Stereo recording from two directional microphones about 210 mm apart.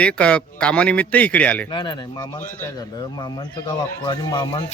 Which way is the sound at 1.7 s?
20° left (ahead or behind).